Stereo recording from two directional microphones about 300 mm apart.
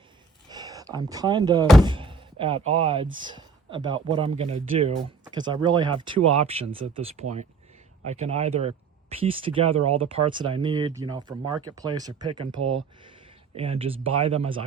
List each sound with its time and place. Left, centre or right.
0.4 s a sound: centre
1.8 s speech: centre
6.1 s speech: right
6.5 s speech: centre
12.6 s speech: right
13.6 s speech: centre